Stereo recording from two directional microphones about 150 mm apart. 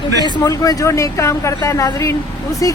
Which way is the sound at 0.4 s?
25° left (ahead or behind).